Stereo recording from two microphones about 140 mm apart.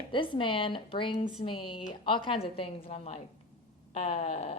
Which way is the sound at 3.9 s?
50° left (ahead or behind).